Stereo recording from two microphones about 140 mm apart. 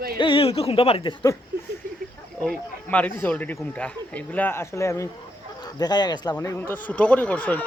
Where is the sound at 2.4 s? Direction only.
10° left (ahead or behind); by 6.3 s 30° left (ahead or behind).